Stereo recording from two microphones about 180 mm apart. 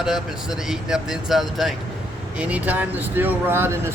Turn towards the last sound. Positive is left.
turn(degrees=-15)  # may be behind; listen again after turning